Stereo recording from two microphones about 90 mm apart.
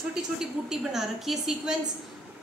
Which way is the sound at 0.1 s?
5° right (ahead or behind).